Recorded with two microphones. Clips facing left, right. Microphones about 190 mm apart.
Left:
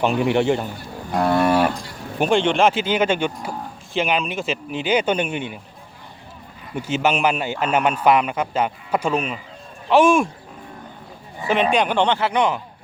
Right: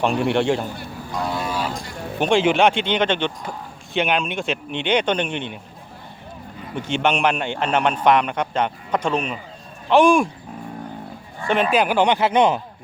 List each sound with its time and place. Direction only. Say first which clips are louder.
0.0 s speech: left 1 dB; centre (ahead or behind)
1.1 s moo: left 8 dB; 60° left (ahead or behind)
2.1 s speech: even; 5° left (ahead or behind)
2.4 s speech: right 1 dB; 5° right (ahead or behind)
6.7 s speech: left 1 dB; 5° left (ahead or behind)
11.4 s speech: even; centre (ahead or behind); by 12.5 s 20° right (ahead or behind)